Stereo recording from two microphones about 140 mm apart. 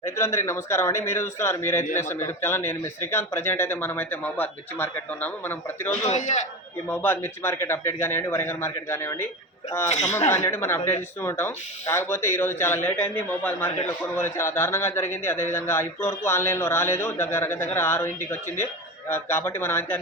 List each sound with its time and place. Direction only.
0.0 s a man's voice: 20° left (ahead or behind)
6.1 s a man's voice: 60° left (ahead or behind)
6.8 s a man's voice: 15° left (ahead or behind)
9.9 s a man's voice: 55° left (ahead or behind)
10.3 s a man's voice: 20° left (ahead or behind)